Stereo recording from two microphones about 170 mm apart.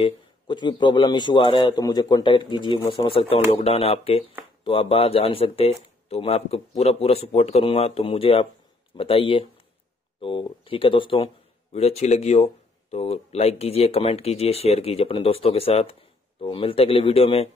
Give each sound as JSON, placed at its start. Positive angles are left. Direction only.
{"t": 0.0, "sound": "a man's voice", "side_deg": 30}